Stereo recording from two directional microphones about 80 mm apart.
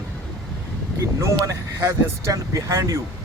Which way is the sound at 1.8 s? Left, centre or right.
Right.